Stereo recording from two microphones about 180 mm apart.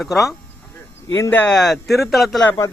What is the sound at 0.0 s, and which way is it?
Speech, centre (ahead or behind).